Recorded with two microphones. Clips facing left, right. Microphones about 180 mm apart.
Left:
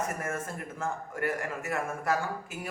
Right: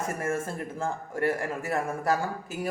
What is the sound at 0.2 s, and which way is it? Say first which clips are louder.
A man's voice: right 5 dB; 30° right (ahead or behind).